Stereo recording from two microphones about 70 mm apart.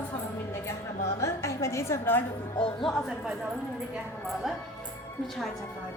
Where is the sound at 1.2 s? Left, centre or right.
Left.